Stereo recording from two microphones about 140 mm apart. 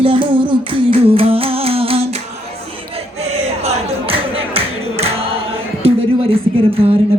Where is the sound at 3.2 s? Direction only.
50° right (ahead or behind).